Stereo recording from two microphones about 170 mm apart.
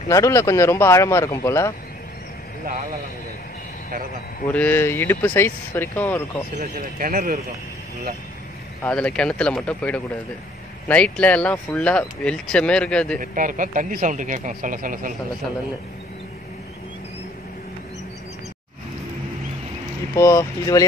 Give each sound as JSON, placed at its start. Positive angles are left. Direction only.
{"t": 0.1, "sound": "speech", "side_deg": 20}
{"t": 4.5, "sound": "speech", "side_deg": 10}
{"t": 6.6, "sound": "speech", "side_deg": -55}
{"t": 8.8, "sound": "speech", "side_deg": 5}
{"t": 13.2, "sound": "speech", "side_deg": -50}
{"t": 20.2, "sound": "speech", "side_deg": 15}